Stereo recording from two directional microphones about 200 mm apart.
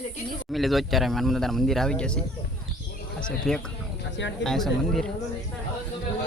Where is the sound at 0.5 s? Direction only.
Centre (ahead or behind).